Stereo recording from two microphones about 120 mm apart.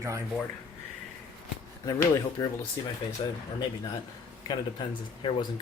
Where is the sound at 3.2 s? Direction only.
40° left (ahead or behind).